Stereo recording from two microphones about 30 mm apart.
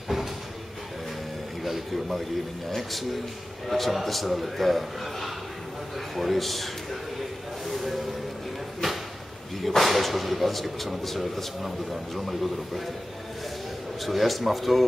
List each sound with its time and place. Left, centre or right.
1.6 s speech: centre
7.6 s a sound: centre
9.6 s speech: centre
14.0 s speech: centre